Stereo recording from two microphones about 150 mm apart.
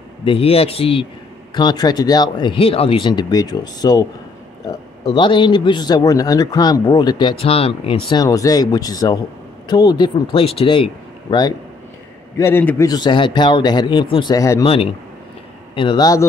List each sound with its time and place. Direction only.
0.2 s a man's voice: 40° left (ahead or behind)
1.5 s a man's voice: 30° left (ahead or behind)
8.2 s a man's voice: 25° left (ahead or behind)
12.4 s a man's voice: 15° left (ahead or behind)
14.6 s a man's voice: 40° left (ahead or behind)